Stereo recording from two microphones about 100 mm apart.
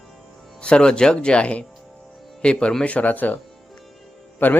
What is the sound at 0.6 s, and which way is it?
Speech, 10° left (ahead or behind).